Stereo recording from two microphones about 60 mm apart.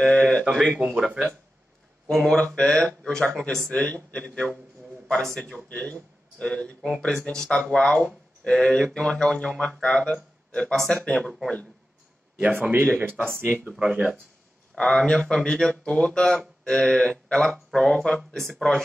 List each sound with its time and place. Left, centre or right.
0.0 s speech: centre
0.9 s speech: centre
2.0 s a man's voice: centre
4.4 s a man's voice: centre
12.4 s speech: right
14.8 s speech: centre